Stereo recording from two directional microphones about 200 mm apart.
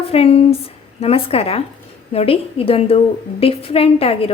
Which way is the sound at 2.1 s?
30° left (ahead or behind).